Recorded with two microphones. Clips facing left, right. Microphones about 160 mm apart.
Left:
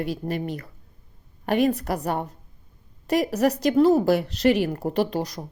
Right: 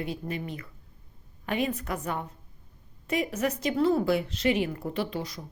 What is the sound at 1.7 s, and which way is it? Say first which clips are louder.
Speech: left 6 dB; 35° left (ahead or behind).